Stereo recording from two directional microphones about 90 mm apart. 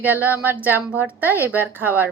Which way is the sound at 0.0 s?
20° right (ahead or behind).